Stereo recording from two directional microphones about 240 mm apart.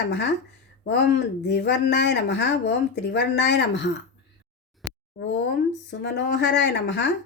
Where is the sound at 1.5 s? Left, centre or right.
Left.